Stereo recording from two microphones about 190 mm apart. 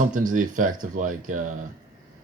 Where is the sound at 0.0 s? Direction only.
45° right (ahead or behind).